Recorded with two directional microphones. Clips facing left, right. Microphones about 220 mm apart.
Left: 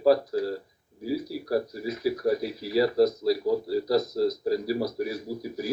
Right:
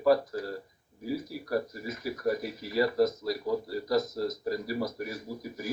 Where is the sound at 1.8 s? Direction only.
35° left (ahead or behind).